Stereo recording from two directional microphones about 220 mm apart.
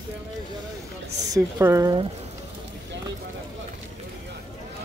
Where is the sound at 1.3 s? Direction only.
15° right (ahead or behind).